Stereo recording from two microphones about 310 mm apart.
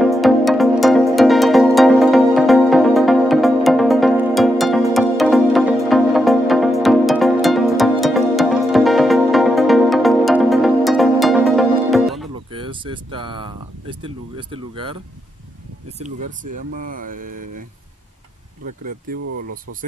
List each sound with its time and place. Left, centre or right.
0.0 s music: centre
12.5 s a sound: centre
16.7 s speech: right
19.1 s speech: right